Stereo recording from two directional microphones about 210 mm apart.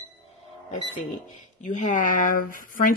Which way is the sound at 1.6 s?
35° left (ahead or behind).